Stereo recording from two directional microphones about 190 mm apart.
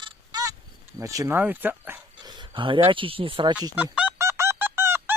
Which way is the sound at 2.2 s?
20° right (ahead or behind).